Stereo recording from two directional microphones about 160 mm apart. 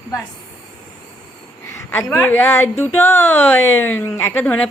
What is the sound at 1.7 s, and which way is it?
A woman's voice, 15° left (ahead or behind).